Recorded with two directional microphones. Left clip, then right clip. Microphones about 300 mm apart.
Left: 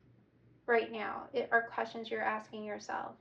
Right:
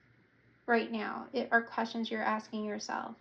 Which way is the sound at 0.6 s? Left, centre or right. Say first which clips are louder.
Even; centre.